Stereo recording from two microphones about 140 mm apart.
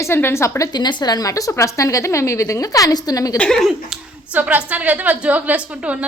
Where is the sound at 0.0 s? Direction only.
15° left (ahead or behind).